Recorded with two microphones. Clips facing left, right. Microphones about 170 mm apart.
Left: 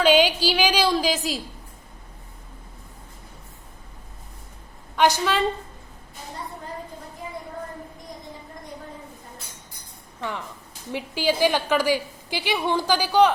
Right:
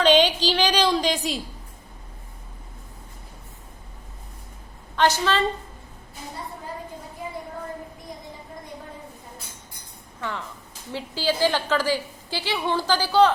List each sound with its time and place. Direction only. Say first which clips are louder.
0.0 s a woman's voice: even; 10° left (ahead or behind)
4.9 s a woman's voice: left 1 dB; 10° left (ahead or behind)
10.2 s a woman's voice: left 1 dB; 15° left (ahead or behind)